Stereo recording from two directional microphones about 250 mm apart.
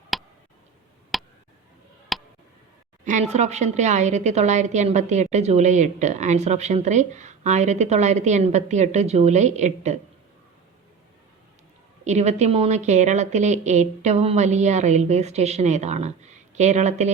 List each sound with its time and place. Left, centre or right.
0.1 s tick: centre
2.1 s a sound: centre
3.0 s a woman's voice: right
12.0 s a woman's voice: right